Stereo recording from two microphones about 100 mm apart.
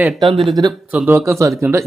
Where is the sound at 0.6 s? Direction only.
50° right (ahead or behind).